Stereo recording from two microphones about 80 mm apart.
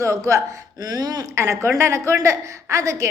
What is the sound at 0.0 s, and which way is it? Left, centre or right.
A woman's voice, right.